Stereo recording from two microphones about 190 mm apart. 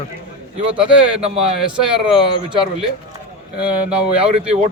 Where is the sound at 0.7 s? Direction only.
5° right (ahead or behind).